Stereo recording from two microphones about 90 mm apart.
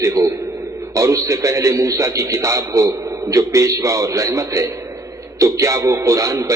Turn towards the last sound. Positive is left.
turn(degrees=-35)  # may be behind; listen again after turning